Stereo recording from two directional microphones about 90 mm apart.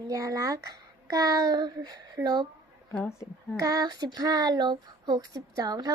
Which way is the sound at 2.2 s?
50° right (ahead or behind).